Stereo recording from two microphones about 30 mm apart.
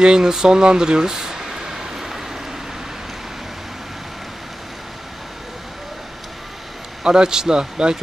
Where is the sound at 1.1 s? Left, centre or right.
Centre.